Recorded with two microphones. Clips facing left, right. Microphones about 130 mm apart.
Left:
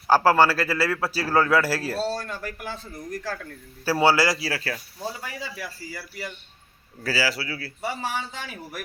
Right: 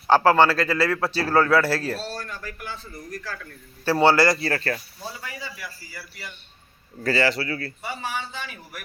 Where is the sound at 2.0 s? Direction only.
25° left (ahead or behind).